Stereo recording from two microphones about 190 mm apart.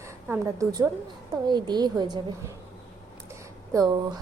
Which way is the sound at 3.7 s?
20° right (ahead or behind).